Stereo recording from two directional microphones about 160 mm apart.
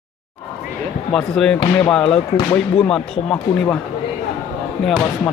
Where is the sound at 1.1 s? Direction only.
5° left (ahead or behind).